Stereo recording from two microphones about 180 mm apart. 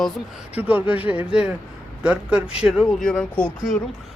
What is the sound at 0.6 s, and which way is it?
Speech, 10° right (ahead or behind).